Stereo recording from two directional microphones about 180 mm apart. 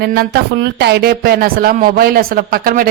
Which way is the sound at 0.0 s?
65° right (ahead or behind).